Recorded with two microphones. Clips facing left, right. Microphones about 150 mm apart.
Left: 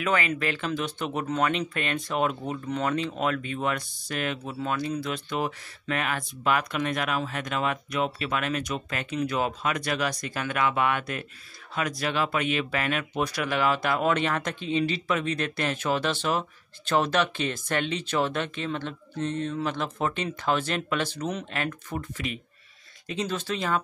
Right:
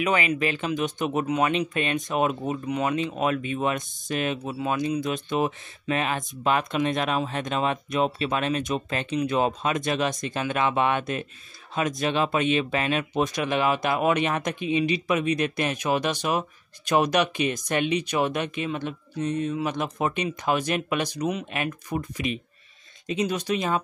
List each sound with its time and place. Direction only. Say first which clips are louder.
0.0 s speech: right 2 dB; 20° right (ahead or behind)